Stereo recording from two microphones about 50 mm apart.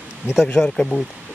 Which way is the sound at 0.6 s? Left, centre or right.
Centre.